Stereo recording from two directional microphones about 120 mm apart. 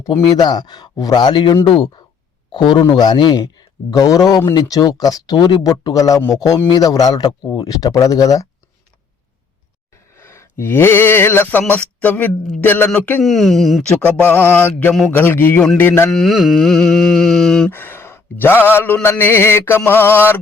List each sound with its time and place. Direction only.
0.1 s speech: 35° left (ahead or behind)
7.6 s mantra: 30° left (ahead or behind)
10.2 s speech: 20° left (ahead or behind)
13.2 s music: centre (ahead or behind)
14.3 s speech: 15° left (ahead or behind)
15.8 s mantra: 20° left (ahead or behind)
16.1 s music: centre (ahead or behind)
17.7 s speech: 20° left (ahead or behind)
19.0 s mantra: 20° left (ahead or behind)